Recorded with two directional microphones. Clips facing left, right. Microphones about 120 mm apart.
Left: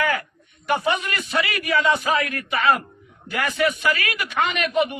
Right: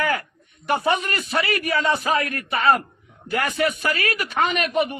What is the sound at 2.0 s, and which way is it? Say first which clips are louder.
Speech: even; 40° right (ahead or behind).